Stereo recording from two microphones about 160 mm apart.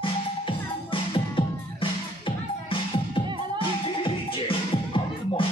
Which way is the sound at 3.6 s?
35° left (ahead or behind).